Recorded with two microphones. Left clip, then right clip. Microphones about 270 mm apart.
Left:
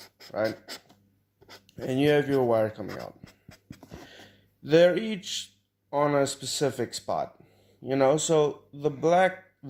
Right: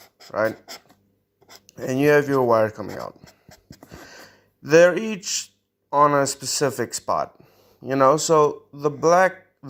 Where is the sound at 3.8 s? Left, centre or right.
Centre.